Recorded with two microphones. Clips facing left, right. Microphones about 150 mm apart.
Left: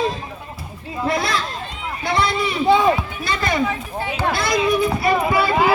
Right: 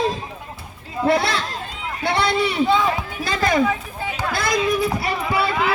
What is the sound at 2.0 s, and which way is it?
Speech, 70° right (ahead or behind).